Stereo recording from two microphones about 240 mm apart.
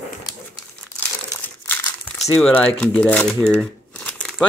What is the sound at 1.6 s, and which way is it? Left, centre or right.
Crumpling, centre.